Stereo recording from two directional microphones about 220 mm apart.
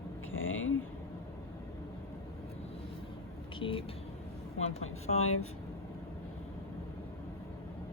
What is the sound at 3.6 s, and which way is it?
Speech, 25° left (ahead or behind).